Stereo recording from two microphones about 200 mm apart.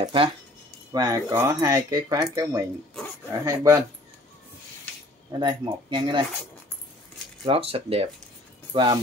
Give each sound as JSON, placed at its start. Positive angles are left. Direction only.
{"t": 0.0, "sound": "speech", "side_deg": -25}
{"t": 5.4, "sound": "speech", "side_deg": -20}
{"t": 7.4, "sound": "speech", "side_deg": -30}